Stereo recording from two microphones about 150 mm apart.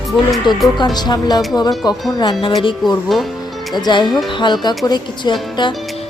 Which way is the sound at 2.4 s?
35° left (ahead or behind).